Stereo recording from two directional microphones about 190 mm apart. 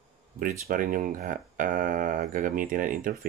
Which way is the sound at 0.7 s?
45° right (ahead or behind).